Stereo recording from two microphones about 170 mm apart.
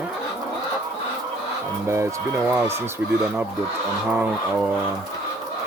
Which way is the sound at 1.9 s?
15° right (ahead or behind).